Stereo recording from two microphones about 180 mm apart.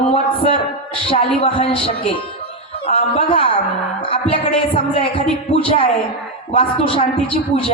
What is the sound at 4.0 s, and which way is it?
Music, 30° left (ahead or behind).